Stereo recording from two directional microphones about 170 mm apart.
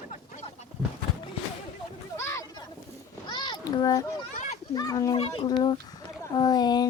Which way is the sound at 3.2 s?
25° left (ahead or behind).